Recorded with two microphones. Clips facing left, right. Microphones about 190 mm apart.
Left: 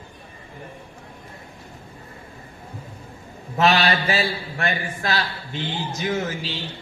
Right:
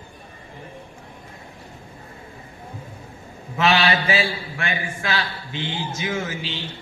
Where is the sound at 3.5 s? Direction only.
40° left (ahead or behind).